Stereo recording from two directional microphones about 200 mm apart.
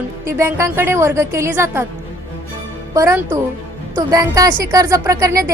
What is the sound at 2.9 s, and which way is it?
Speech, 15° right (ahead or behind).